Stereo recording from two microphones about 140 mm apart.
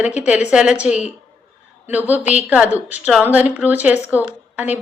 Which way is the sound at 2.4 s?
10° right (ahead or behind).